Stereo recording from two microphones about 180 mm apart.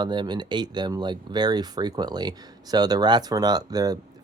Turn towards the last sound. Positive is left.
turn(degrees=-20)  # may be behind; listen again after turning